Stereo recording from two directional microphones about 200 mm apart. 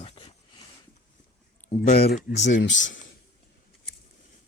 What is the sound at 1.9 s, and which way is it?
Speech, 35° left (ahead or behind).